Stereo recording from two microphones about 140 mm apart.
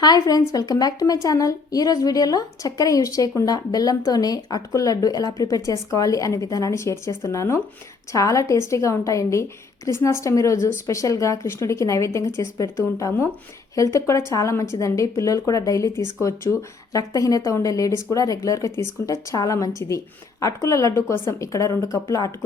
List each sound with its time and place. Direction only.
0.0 s a woman's voice: 25° left (ahead or behind)